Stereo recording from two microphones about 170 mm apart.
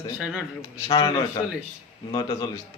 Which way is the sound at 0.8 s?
25° left (ahead or behind).